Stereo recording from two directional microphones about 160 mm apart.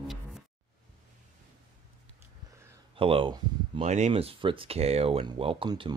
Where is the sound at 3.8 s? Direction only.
45° right (ahead or behind).